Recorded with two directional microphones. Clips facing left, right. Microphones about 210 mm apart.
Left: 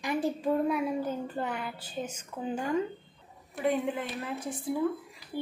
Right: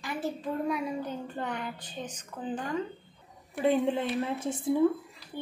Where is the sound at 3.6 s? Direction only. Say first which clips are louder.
Right 3 dB; 30° right (ahead or behind).